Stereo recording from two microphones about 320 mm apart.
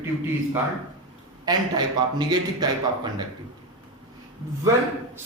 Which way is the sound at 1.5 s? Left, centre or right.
Centre.